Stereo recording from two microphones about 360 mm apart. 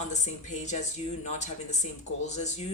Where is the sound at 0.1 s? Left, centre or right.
Centre.